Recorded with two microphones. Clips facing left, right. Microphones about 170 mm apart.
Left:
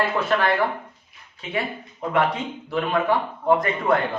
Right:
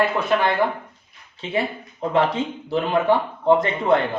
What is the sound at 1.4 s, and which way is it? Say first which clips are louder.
A man's voice: right 3 dB; 30° right (ahead or behind).